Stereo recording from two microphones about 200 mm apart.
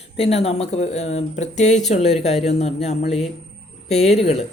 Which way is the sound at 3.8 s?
35° left (ahead or behind).